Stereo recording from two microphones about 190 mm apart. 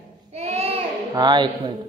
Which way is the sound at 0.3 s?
35° right (ahead or behind).